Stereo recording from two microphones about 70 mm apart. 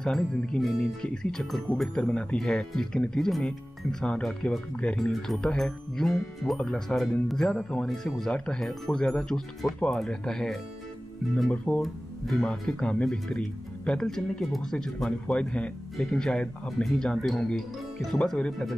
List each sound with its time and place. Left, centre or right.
0.0 s speech: centre
11.5 s speech: left
11.8 s speech: centre